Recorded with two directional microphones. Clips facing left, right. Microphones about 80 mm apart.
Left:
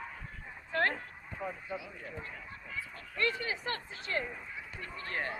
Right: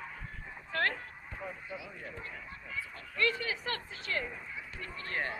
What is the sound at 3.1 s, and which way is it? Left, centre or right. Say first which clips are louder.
Speech: right 1 dB; left.